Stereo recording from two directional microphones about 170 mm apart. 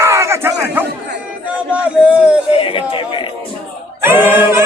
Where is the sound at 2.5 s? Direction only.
30° left (ahead or behind).